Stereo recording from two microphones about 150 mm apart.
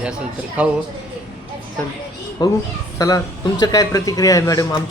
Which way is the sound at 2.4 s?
25° left (ahead or behind).